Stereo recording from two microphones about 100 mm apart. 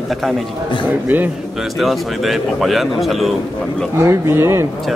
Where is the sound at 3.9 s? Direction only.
25° right (ahead or behind).